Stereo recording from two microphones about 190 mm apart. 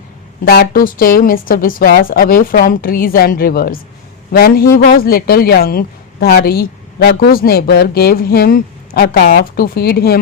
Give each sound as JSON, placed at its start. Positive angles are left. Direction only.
{"t": 0.4, "sound": "speech", "side_deg": 55}